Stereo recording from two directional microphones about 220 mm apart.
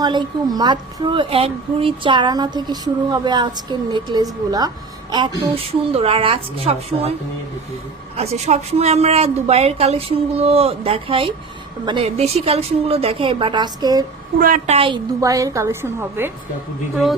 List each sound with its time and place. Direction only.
0.0 s speech: 20° right (ahead or behind)
5.9 s speech: 25° right (ahead or behind)
8.1 s speech: 30° right (ahead or behind)
14.4 s a woman's voice: 40° right (ahead or behind)
14.8 s a woman's voice: 20° right (ahead or behind)